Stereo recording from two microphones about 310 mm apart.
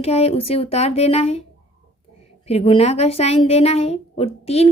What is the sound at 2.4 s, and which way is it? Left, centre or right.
A woman's voice, centre.